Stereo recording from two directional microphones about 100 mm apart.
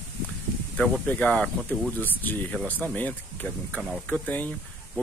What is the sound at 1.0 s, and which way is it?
Speech, 15° left (ahead or behind).